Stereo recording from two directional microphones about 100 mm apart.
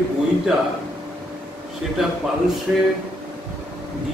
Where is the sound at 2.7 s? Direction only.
15° right (ahead or behind).